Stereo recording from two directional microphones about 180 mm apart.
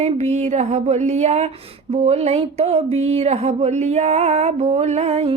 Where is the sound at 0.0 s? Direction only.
40° right (ahead or behind).